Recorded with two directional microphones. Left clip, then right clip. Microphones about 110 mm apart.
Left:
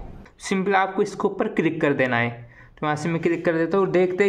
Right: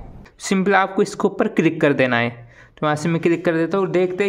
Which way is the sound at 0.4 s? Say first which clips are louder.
Right 4 dB; 40° right (ahead or behind).